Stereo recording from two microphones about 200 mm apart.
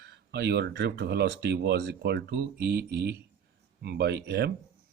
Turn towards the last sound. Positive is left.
turn(degrees=-55)  # may be behind; listen again after turning